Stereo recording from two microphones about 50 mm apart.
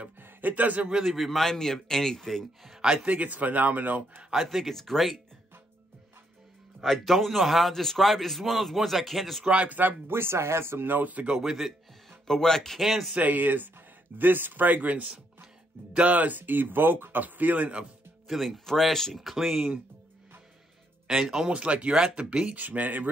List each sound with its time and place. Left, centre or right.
0.2 s speech: right
1.0 s a man's voice: centre
2.7 s speech: centre
3.1 s speech: right
4.3 s a man's voice: centre
6.8 s a man's voice: centre
9.4 s speech: right
11.4 s a man's voice: centre
12.1 s a man's voice: centre
13.1 s speech: right
18.3 s a man's voice: centre
21.1 s speech: centre
21.5 s speech: right
22.6 s speech: right